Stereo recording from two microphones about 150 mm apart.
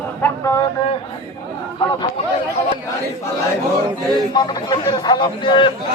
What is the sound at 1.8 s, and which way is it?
Speech, 40° left (ahead or behind).